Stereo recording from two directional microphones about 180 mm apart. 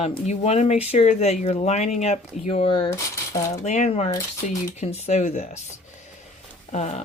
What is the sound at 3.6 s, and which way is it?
Speech, 40° left (ahead or behind).